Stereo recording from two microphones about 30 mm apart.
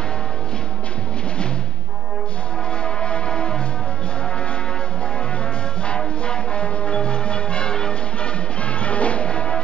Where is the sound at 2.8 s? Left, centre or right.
Left.